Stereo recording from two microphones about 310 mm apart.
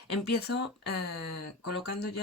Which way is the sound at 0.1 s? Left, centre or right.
Left.